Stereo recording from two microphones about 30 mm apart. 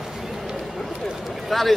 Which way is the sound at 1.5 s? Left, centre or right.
Centre.